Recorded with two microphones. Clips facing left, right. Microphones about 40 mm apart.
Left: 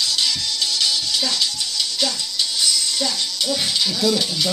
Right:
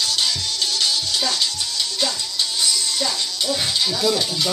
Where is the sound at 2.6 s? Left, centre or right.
Right.